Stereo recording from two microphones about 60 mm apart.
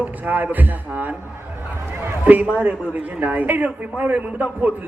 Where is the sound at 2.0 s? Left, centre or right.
Right.